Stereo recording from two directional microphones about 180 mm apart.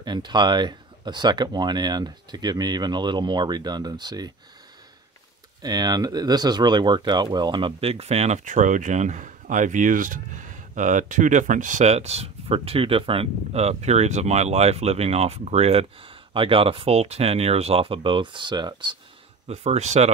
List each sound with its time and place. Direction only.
0.0 s speech: 25° right (ahead or behind)
5.6 s speech: 20° right (ahead or behind)
19.4 s speech: 35° right (ahead or behind)